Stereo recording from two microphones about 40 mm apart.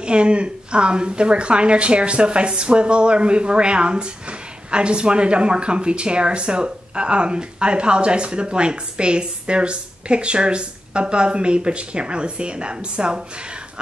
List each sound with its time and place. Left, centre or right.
0.0 s a woman's voice: right